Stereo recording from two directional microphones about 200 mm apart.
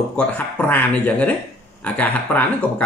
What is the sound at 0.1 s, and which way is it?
Speech, 10° left (ahead or behind).